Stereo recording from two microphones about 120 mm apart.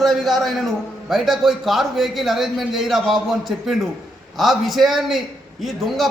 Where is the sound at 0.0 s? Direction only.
Centre (ahead or behind).